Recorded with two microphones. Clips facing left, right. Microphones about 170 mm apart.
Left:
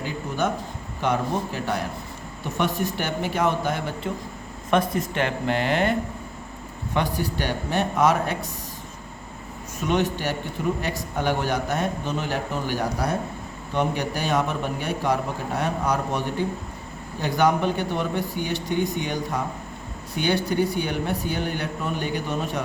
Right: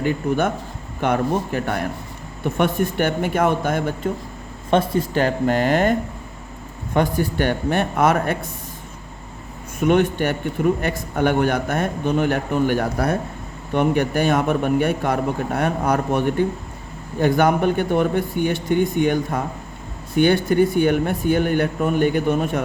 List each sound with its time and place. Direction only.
0.0 s a man's voice: 55° right (ahead or behind)
4.7 s a man's voice: 30° right (ahead or behind); by 8.4 s 55° right (ahead or behind)
9.8 s a man's voice: 55° right (ahead or behind)